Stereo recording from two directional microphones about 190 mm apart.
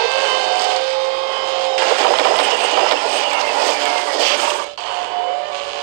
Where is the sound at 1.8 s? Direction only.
50° right (ahead or behind).